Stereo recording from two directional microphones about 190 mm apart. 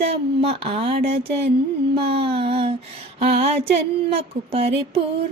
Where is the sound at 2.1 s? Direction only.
30° right (ahead or behind).